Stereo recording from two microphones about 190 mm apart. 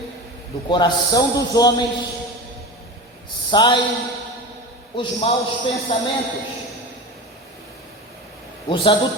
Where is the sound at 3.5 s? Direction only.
25° left (ahead or behind).